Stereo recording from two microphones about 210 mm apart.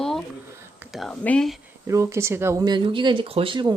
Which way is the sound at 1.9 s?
15° right (ahead or behind).